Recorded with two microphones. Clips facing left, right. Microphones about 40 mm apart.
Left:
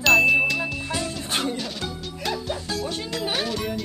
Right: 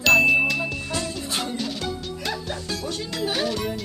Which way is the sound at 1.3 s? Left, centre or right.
Left.